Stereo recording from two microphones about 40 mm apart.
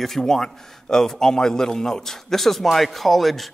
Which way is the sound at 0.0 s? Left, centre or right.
Centre.